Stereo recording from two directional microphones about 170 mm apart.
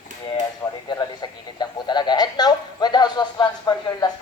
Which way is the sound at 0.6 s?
20° left (ahead or behind).